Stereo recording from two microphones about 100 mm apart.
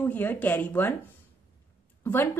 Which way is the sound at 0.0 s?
20° left (ahead or behind).